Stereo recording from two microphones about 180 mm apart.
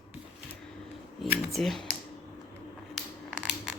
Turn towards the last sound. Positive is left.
turn(degrees=-5)  # may be behind; listen again after turning